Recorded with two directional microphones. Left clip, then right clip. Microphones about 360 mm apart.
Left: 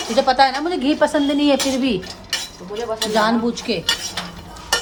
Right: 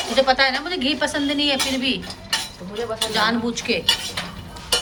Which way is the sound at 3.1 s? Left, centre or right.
Centre.